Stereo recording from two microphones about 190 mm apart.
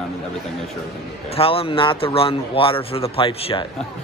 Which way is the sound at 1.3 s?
30° left (ahead or behind).